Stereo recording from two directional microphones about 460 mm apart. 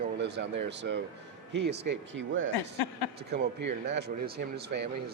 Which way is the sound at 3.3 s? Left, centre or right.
Right.